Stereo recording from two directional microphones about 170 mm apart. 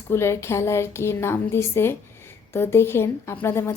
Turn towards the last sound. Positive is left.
turn(degrees=15)  # may be behind; listen again after turning